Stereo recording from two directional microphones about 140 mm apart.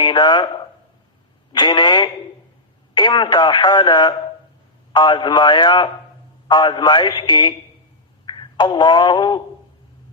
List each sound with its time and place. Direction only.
0.0 s speech: 35° left (ahead or behind)
1.5 s speech: 35° left (ahead or behind)
8.3 s a sound: 35° left (ahead or behind)